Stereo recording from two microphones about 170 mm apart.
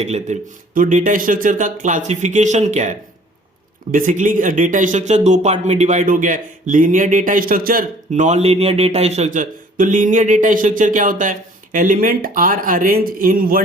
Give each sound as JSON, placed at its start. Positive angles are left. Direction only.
{"t": 0.0, "sound": "speech", "side_deg": -45}
{"t": 3.9, "sound": "speech", "side_deg": -50}